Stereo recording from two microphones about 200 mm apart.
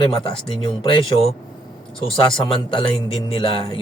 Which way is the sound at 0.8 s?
25° left (ahead or behind).